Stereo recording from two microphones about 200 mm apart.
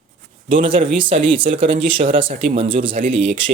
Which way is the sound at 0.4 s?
25° right (ahead or behind).